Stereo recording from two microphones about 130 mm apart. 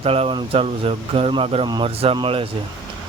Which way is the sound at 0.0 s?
50° right (ahead or behind).